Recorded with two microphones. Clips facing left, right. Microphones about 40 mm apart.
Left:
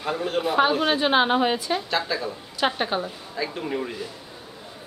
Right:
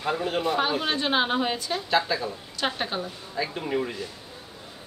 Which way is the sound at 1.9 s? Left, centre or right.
Centre.